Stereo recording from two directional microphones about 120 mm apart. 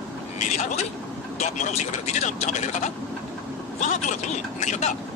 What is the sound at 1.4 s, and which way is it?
Speech, 80° left.